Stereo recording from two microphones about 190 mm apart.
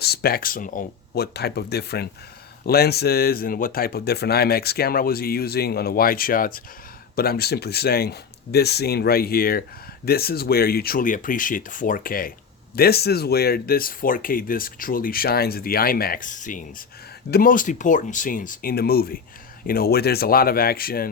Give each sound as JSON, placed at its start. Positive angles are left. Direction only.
{"t": 0.0, "sound": "speech", "side_deg": 55}